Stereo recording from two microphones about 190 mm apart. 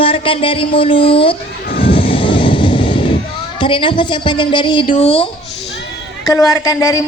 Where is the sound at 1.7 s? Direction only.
30° left (ahead or behind).